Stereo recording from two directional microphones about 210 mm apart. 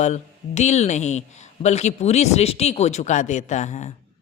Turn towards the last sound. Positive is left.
turn(degrees=35)  # may be behind; listen again after turning